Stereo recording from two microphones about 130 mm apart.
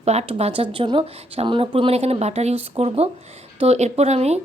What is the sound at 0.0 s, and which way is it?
Speech, 55° right (ahead or behind).